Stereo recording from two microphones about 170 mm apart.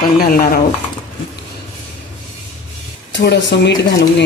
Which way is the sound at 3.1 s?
85° left.